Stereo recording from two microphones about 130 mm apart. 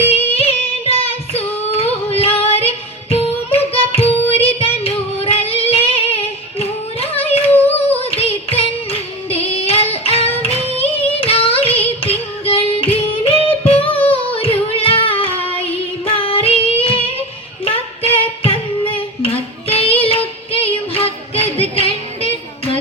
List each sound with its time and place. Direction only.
0.1 s singing: 50° left (ahead or behind)
2.0 s female singing: 50° left (ahead or behind)
7.7 s singing: 50° left (ahead or behind)
14.3 s music: 45° left (ahead or behind)
18.2 s music: 50° left (ahead or behind)
18.9 s child singing: 45° left (ahead or behind)